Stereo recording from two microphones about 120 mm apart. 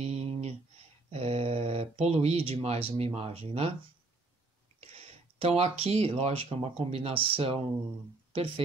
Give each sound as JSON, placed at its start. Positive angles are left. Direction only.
{"t": 0.0, "sound": "a sound", "side_deg": -60}
{"t": 1.1, "sound": "speech", "side_deg": -55}
{"t": 4.7, "sound": "speech", "side_deg": -60}